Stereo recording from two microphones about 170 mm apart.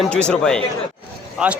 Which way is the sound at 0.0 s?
5° left (ahead or behind).